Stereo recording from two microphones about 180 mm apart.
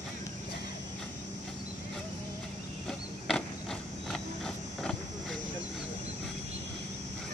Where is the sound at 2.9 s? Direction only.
Centre (ahead or behind).